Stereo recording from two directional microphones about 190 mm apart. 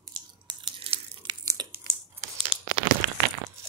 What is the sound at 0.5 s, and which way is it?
Tearing, 25° right (ahead or behind).